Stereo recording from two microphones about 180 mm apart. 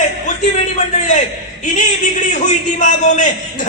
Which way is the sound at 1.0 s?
45° left (ahead or behind).